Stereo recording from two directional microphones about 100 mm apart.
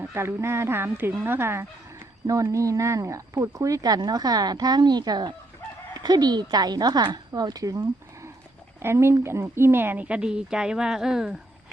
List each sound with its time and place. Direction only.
0.0 s speech: 20° right (ahead or behind)
2.2 s a woman's voice: 35° right (ahead or behind); by 11.3 s 5° right (ahead or behind)